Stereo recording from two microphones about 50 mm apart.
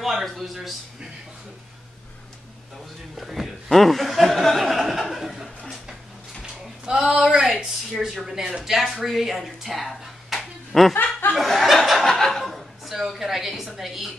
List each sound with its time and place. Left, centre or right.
0.0 s a man's voice: centre
3.2 s speech: centre
6.4 s a sound: centre
7.2 s speech: centre
11.0 s speech: left
11.3 s speech: centre